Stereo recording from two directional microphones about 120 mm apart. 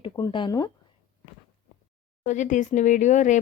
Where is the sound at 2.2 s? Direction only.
90° left.